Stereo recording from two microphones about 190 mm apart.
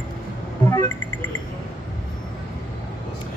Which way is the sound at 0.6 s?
15° left (ahead or behind).